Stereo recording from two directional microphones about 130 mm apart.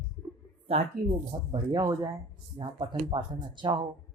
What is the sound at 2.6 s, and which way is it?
Speech, 40° right (ahead or behind).